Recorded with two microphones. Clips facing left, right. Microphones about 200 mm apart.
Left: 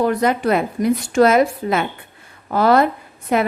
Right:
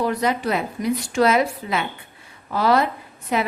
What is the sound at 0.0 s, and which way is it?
A woman's voice, 50° left (ahead or behind).